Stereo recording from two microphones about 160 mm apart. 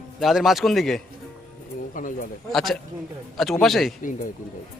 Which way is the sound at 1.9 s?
55° left (ahead or behind).